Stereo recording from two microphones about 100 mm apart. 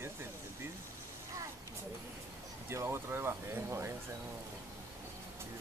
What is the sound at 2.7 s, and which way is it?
Speech, 25° right (ahead or behind).